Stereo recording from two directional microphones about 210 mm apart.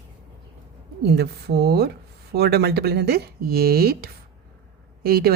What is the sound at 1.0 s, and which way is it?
A woman's voice, 50° right (ahead or behind).